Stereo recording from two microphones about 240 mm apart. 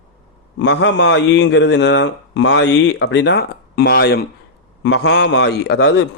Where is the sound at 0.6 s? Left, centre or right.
Left.